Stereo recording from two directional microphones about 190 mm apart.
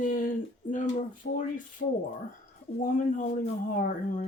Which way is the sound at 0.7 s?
40° left (ahead or behind).